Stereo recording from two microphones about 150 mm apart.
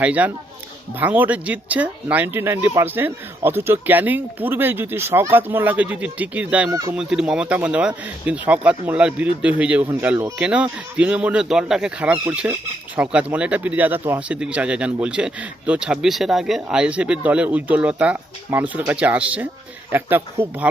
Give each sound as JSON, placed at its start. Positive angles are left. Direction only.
{"t": 0.0, "sound": "speech", "side_deg": -10}
{"t": 6.7, "sound": "speech", "side_deg": -25}
{"t": 6.9, "sound": "speech", "side_deg": -5}